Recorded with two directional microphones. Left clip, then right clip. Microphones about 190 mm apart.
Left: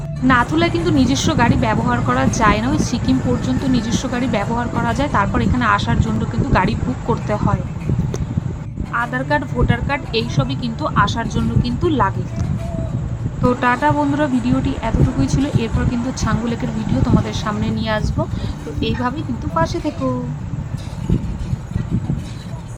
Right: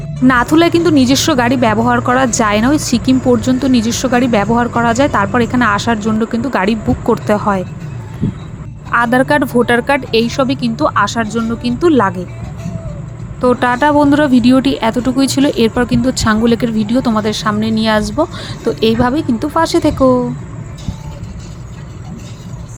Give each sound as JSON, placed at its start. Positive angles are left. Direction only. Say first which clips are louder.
{"t": 0.3, "sound": "speech", "louder": "right 5 dB", "side_deg": -45}
{"t": 8.9, "sound": "speech", "louder": "right 8 dB", "side_deg": -50}
{"t": 13.4, "sound": "speech", "louder": "right 5 dB", "side_deg": -40}